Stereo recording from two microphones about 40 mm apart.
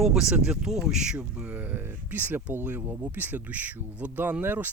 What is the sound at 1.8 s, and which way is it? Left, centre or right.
Speech, right.